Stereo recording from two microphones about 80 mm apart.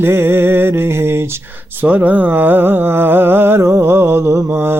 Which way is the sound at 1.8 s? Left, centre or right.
Centre.